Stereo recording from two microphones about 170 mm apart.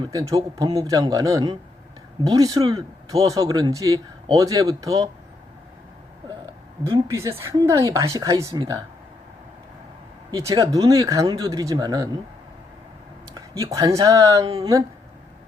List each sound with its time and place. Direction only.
0.1 s speech: 20° right (ahead or behind)
6.4 s a sound: 25° right (ahead or behind)
7.2 s speech: 15° right (ahead or behind)
10.3 s speech: 20° right (ahead or behind)
13.3 s speech: 20° right (ahead or behind)